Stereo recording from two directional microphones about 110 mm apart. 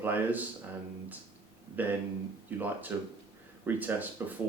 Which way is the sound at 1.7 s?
15° right (ahead or behind).